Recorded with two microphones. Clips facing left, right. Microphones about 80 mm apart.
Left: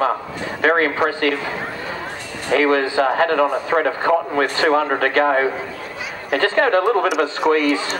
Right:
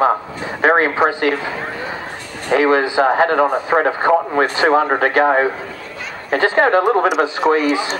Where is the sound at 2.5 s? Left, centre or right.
Centre.